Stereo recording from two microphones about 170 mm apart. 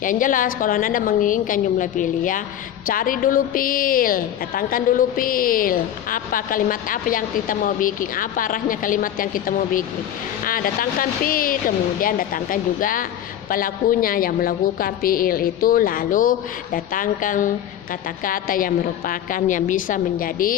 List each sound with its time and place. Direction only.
0.0 s a woman's voice: 50° left (ahead or behind)